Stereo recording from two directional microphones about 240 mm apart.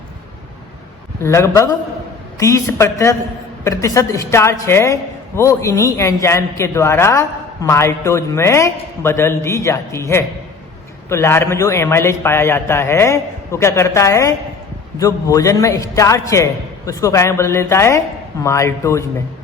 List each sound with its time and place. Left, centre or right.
1.2 s a man's voice: centre